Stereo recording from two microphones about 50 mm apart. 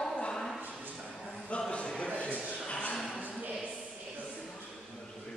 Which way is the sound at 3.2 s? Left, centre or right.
Right.